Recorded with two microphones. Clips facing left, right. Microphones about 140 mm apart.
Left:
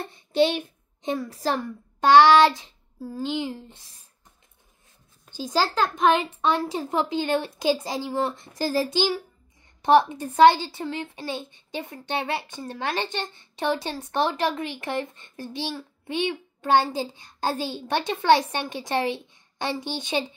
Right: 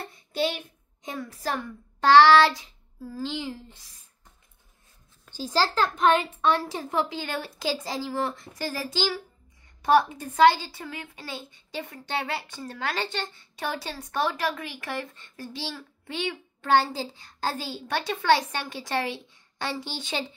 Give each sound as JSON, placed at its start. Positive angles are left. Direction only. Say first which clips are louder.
{"t": 0.1, "sound": "a child's voice", "louder": "left 7 dB", "side_deg": 25}
{"t": 2.0, "sound": "child singing", "louder": "left 1 dB", "side_deg": 20}
{"t": 5.2, "sound": "a sound", "louder": "left 1 dB", "side_deg": 15}
{"t": 6.4, "sound": "a woman's voice", "louder": "left 1 dB", "side_deg": 20}
{"t": 8.9, "sound": "a woman's voice", "louder": "left 4 dB", "side_deg": 20}